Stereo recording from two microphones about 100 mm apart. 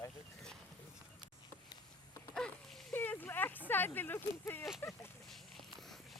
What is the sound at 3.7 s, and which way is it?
Speech, 20° left (ahead or behind).